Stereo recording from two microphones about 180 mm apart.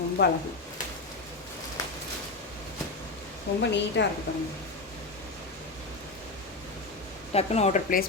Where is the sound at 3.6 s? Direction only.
75° left (ahead or behind).